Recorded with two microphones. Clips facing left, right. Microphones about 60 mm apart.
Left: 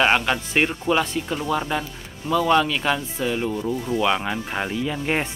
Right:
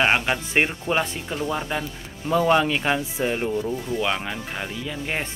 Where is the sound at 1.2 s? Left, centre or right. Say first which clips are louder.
Left 2 dB; centre.